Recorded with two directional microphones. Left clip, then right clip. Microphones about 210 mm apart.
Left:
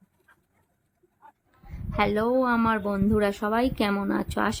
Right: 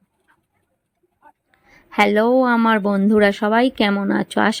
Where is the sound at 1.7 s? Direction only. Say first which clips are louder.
Right 9 dB; 20° right (ahead or behind).